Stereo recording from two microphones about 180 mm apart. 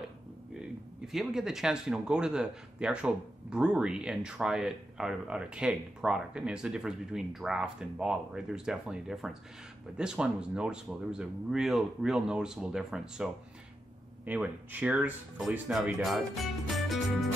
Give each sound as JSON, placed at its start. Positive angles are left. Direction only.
{"t": 0.6, "sound": "speech", "side_deg": 0}